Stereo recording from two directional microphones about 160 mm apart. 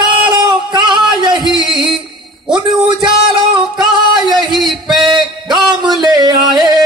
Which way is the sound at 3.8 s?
30° right (ahead or behind).